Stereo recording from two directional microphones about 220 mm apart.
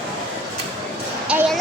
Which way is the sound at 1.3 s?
5° right (ahead or behind).